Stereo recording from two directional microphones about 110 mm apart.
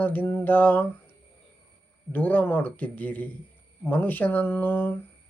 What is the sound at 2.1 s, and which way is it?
Speech, 15° left (ahead or behind).